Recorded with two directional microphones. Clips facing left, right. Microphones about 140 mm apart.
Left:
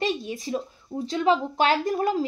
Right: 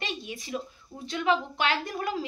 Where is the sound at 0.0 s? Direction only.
35° left (ahead or behind).